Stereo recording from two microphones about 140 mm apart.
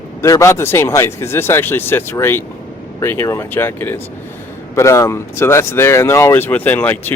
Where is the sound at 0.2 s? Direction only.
20° left (ahead or behind).